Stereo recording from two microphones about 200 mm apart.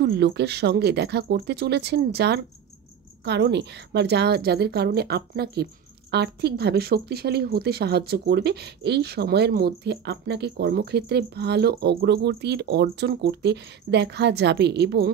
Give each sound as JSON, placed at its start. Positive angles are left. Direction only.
{"t": 0.0, "sound": "a woman's voice", "side_deg": -55}